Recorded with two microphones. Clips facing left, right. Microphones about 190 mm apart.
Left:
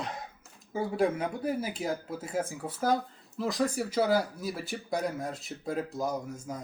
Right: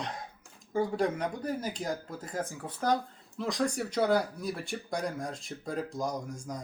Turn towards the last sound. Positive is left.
turn(degrees=5)  # may be behind; listen again after turning